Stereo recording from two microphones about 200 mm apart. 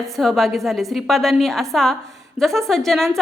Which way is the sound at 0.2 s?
Centre (ahead or behind).